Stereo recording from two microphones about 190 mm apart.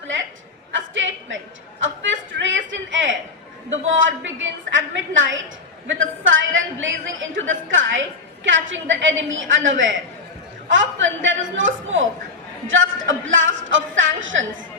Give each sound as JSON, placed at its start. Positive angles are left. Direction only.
{"t": 0.7, "sound": "a sound", "side_deg": -85}
{"t": 4.2, "sound": "a woman's voice", "side_deg": -80}
{"t": 6.0, "sound": "a woman's voice", "side_deg": -90}
{"t": 8.4, "sound": "a woman's voice", "side_deg": -75}